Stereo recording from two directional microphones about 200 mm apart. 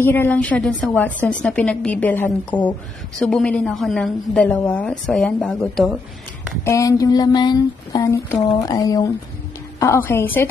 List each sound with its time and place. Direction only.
0.0 s a woman's voice: 10° left (ahead or behind)
6.6 s a woman's voice: 15° left (ahead or behind)